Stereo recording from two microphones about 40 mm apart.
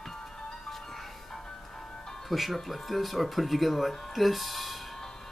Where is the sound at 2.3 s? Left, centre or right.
Centre.